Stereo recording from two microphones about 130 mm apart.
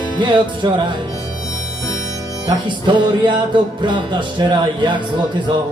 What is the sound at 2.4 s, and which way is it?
Music, 35° right (ahead or behind).